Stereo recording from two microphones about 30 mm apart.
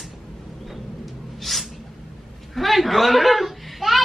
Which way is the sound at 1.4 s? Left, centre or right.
Centre.